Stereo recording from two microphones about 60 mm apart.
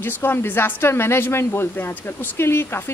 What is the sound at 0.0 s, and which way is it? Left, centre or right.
Speech, left.